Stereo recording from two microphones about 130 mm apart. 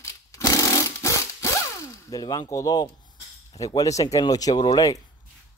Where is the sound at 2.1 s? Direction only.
30° left (ahead or behind).